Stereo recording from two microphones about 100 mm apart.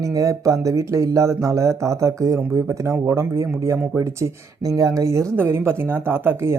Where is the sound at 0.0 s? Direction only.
35° right (ahead or behind).